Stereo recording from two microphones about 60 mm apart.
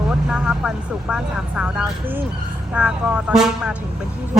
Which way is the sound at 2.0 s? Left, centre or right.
Right.